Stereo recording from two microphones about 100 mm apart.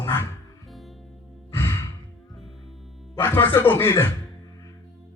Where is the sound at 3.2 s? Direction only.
25° left (ahead or behind).